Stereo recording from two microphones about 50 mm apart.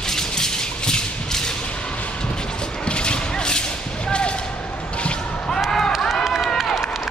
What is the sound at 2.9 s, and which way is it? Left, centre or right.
Clip-clop, centre.